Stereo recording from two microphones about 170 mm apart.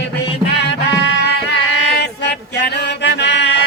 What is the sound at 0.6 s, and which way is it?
Music, 85° left.